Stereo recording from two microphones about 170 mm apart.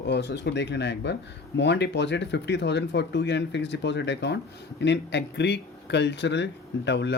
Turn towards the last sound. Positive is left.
turn(degrees=90)